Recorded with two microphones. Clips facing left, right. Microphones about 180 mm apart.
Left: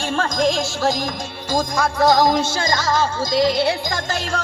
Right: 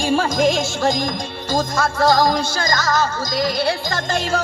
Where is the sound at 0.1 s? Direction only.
5° right (ahead or behind).